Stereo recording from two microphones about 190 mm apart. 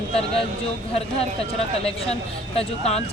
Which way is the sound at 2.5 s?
35° left (ahead or behind).